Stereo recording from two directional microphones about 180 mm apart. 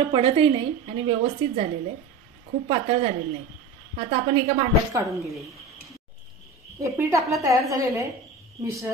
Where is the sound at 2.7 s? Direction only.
35° right (ahead or behind).